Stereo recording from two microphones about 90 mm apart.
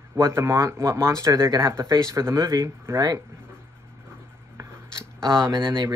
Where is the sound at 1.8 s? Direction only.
45° right (ahead or behind).